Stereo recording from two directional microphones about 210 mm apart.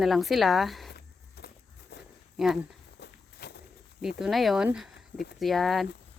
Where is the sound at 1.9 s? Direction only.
50° left (ahead or behind).